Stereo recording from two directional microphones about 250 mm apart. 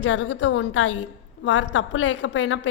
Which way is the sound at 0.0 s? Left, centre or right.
Left.